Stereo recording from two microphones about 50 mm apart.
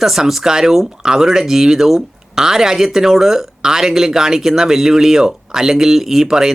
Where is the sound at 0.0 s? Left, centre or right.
Centre.